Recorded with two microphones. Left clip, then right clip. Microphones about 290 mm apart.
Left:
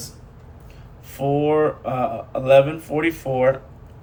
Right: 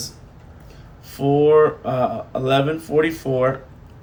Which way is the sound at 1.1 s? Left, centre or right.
Centre.